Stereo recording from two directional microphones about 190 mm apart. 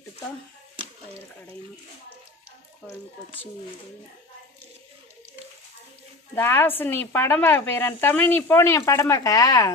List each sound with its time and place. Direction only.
6.3 s speech: 10° left (ahead or behind)